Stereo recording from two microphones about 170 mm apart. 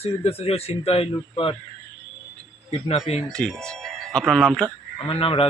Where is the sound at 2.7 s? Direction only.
35° left (ahead or behind).